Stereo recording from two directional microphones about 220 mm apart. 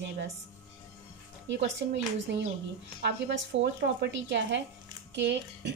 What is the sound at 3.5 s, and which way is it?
A woman's voice, 55° right (ahead or behind).